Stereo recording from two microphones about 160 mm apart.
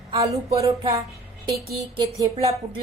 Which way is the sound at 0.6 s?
25° right (ahead or behind).